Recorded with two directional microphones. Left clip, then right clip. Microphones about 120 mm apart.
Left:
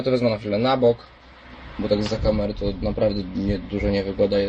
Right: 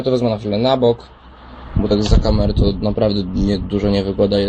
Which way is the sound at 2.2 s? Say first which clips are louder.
Right 4 dB; 40° right (ahead or behind).